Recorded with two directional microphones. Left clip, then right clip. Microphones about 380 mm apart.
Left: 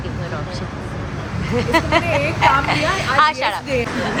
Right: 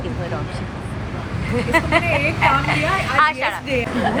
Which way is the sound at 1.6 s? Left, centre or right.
Centre.